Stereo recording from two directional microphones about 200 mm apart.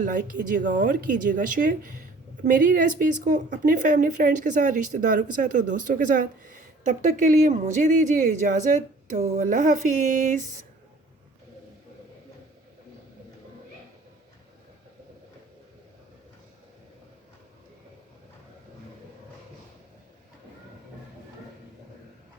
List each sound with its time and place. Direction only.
0.0 s speech: 40° right (ahead or behind)